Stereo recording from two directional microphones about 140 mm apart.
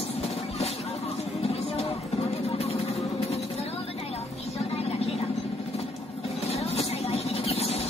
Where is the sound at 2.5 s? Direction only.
50° left (ahead or behind).